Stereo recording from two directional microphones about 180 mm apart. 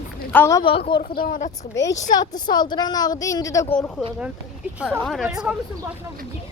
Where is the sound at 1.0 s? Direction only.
50° left (ahead or behind).